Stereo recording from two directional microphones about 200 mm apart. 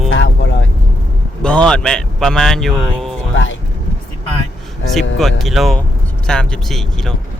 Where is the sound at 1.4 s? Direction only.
5° left (ahead or behind).